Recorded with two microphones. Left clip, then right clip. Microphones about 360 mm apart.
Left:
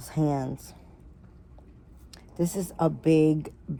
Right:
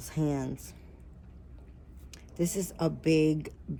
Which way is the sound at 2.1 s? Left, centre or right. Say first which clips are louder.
Left 2 dB; centre.